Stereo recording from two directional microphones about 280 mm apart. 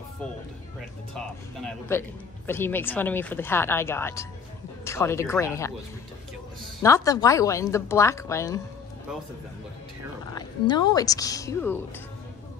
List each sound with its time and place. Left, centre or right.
1.1 s speech: centre
10.3 s speech: centre